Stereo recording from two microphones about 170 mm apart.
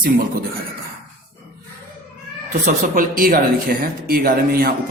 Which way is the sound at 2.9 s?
55° right (ahead or behind).